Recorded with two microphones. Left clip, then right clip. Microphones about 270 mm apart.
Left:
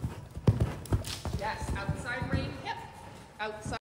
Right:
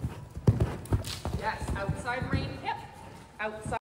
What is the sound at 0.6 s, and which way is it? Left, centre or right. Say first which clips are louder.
Clip-clop: right 2 dB; centre.